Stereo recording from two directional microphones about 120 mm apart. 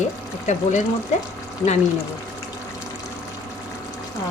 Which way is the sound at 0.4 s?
90° left.